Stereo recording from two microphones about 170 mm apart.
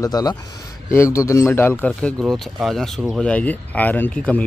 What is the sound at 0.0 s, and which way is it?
Speech, 25° left (ahead or behind).